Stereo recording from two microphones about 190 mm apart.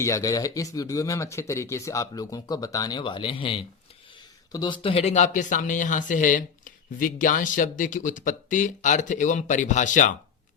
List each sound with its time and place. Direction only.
0.0 s speech: 15° left (ahead or behind); by 10.2 s 40° left (ahead or behind)